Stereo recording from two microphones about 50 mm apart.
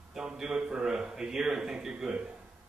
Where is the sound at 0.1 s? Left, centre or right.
Centre.